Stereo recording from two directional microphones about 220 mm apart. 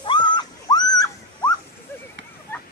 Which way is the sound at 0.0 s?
20° left (ahead or behind).